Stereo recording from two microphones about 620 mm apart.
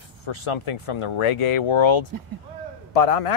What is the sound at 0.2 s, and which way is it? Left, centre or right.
Speech, left.